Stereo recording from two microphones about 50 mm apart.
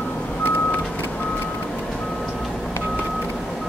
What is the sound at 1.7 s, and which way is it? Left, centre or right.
Reversing beeps, centre.